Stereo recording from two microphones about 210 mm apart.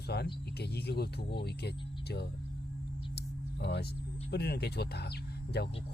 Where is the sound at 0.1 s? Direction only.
50° left (ahead or behind).